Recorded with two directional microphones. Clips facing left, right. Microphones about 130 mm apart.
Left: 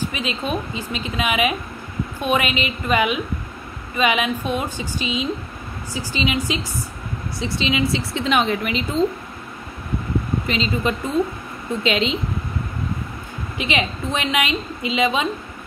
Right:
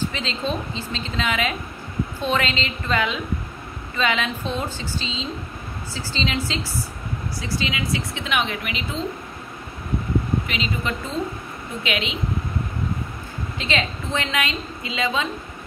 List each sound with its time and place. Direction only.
0.0 s a woman's voice: 15° left (ahead or behind); by 9.0 s 40° left (ahead or behind)
10.4 s speech: 35° left (ahead or behind)
11.8 s a woman's voice: 35° left (ahead or behind)
13.6 s a woman's voice: 15° left (ahead or behind)